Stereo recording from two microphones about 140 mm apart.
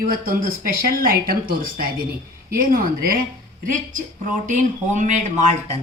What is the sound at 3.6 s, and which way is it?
A woman's voice, 70° right (ahead or behind).